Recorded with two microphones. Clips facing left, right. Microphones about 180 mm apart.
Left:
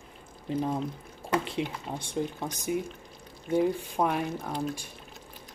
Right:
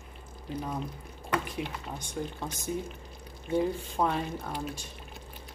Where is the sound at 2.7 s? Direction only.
15° left (ahead or behind).